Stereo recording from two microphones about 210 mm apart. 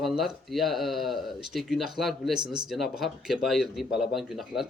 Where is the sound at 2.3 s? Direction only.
20° right (ahead or behind).